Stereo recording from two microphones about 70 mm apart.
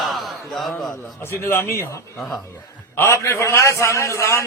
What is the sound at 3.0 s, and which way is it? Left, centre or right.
A man's voice, left.